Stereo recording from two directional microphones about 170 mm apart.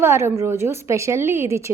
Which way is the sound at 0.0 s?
15° right (ahead or behind).